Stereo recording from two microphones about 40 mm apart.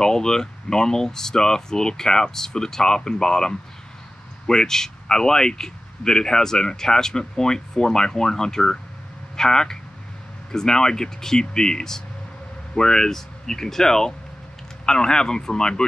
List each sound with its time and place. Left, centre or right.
0.0 s speech: centre